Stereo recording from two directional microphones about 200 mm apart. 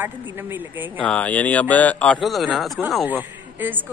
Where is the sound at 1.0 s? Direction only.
5° left (ahead or behind).